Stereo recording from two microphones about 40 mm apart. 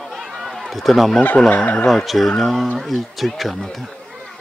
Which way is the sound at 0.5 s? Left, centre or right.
Centre.